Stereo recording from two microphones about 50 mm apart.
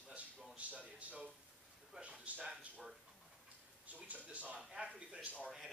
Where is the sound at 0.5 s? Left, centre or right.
Right.